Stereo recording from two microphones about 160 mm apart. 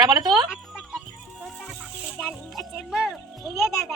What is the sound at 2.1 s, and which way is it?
Speech, centre (ahead or behind).